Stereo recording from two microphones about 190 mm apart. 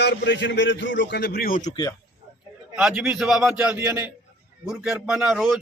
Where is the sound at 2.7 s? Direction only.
5° right (ahead or behind).